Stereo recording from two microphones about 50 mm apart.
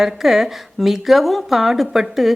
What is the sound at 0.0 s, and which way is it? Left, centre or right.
Speech, centre.